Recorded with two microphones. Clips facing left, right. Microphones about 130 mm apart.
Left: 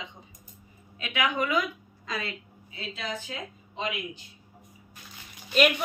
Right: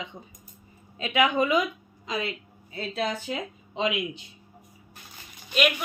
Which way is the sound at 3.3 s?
90° right.